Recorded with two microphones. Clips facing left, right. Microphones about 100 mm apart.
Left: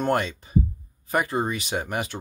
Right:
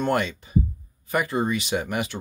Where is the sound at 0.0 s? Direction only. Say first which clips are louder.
Even; 40° left (ahead or behind).